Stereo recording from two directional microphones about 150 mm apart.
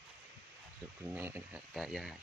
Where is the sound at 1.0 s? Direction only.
15° right (ahead or behind).